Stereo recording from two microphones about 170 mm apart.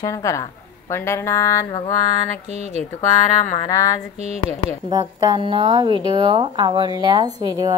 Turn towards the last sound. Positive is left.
turn(degrees=-25)  # may be behind; listen again after turning